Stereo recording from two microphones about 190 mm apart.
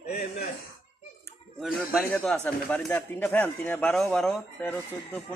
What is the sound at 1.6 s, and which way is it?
Speech, centre (ahead or behind).